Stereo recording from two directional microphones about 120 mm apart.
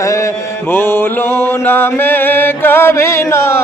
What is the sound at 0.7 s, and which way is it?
Mantra, 20° left (ahead or behind).